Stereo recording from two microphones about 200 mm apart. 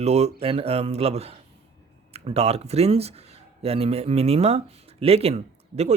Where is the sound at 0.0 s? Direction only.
30° right (ahead or behind).